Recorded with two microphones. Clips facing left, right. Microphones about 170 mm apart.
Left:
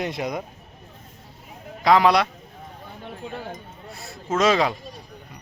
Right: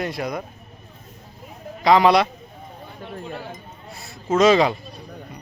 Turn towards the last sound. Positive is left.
turn(degrees=0)  # may be behind; listen again after turning